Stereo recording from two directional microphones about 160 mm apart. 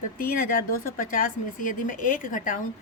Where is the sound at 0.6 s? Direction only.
60° left (ahead or behind).